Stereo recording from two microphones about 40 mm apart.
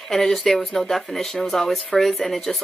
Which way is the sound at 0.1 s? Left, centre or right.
Centre.